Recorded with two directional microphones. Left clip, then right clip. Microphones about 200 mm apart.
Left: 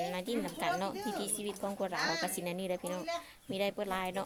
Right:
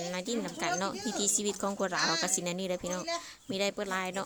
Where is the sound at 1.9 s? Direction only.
60° right (ahead or behind).